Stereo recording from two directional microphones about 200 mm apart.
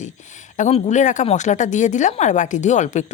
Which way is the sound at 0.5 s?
35° left (ahead or behind).